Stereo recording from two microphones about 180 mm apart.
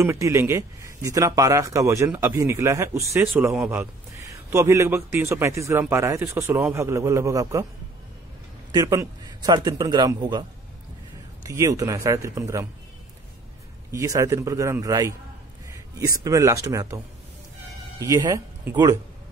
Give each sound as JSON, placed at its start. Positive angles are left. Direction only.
{"t": 0.0, "sound": "a man's voice", "side_deg": -15}
{"t": 8.7, "sound": "a man's voice", "side_deg": -20}
{"t": 11.4, "sound": "a man's voice", "side_deg": -20}
{"t": 13.9, "sound": "a man's voice", "side_deg": -20}